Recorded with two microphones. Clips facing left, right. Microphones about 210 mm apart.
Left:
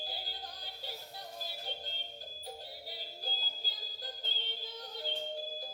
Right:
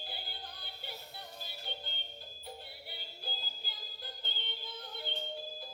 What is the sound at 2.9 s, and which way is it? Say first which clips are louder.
Music: even; 40° left (ahead or behind).